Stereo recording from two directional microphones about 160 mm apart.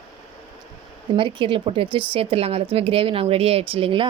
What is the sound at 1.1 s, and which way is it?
Speech, 30° right (ahead or behind).